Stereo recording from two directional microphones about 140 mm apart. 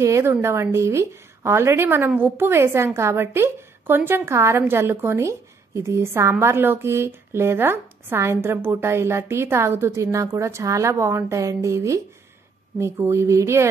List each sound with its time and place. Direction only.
0.0 s a woman's voice: 20° right (ahead or behind)